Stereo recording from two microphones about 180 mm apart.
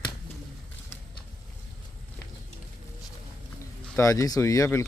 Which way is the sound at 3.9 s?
15° left (ahead or behind).